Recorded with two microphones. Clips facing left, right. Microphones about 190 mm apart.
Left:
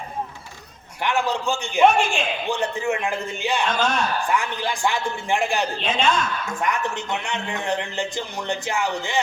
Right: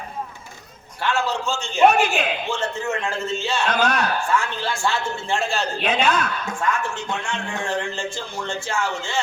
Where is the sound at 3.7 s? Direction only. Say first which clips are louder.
Right 2 dB; 65° right (ahead or behind).